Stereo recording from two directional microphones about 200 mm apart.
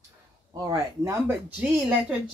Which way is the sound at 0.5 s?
15° right (ahead or behind).